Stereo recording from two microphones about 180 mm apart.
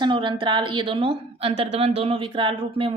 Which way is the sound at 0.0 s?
25° right (ahead or behind).